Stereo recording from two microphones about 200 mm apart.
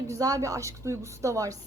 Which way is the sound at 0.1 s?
15° right (ahead or behind).